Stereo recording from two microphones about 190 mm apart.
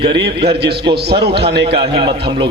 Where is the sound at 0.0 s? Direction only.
25° right (ahead or behind).